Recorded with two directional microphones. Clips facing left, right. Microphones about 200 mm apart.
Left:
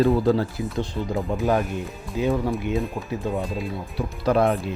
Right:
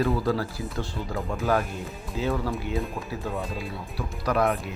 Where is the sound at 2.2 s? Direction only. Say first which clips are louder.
Left 5 dB; 15° left (ahead or behind).